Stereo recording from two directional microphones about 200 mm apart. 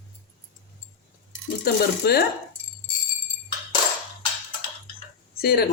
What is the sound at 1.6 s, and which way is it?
Speech, 50° left (ahead or behind).